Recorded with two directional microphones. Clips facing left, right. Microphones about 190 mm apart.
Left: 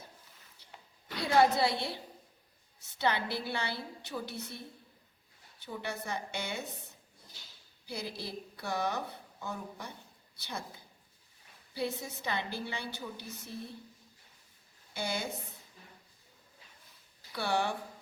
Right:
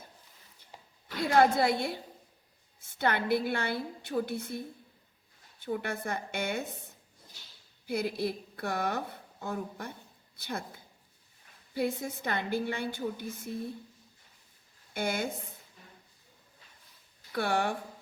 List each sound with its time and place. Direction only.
1.4 s a woman's voice: 50° right (ahead or behind)
7.9 s a woman's voice: 55° right (ahead or behind)
11.7 s a woman's voice: 50° right (ahead or behind)
14.9 s a woman's voice: 50° right (ahead or behind)
17.3 s a woman's voice: 50° right (ahead or behind)